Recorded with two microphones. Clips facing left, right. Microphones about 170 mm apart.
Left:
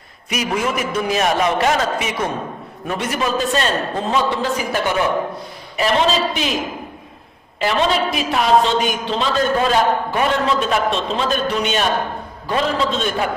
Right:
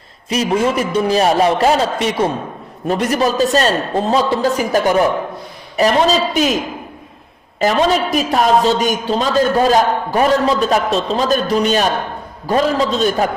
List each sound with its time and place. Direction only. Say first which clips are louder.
0.3 s a man's voice: right 5 dB; 30° right (ahead or behind)
7.6 s a man's voice: right 4 dB; 40° right (ahead or behind)